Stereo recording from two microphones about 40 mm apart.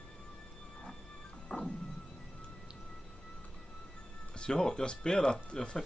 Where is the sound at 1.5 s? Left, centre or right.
Centre.